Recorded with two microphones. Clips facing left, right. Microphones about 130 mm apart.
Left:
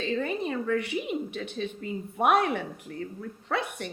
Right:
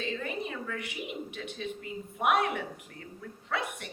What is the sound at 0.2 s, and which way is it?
Speech, 35° left (ahead or behind).